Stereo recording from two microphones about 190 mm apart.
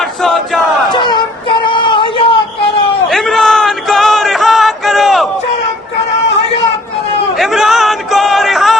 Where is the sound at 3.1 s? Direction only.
Centre (ahead or behind).